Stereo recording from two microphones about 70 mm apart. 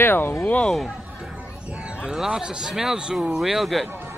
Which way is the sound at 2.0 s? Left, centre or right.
Centre.